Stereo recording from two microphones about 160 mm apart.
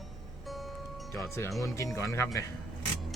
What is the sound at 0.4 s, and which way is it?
Music, centre (ahead or behind).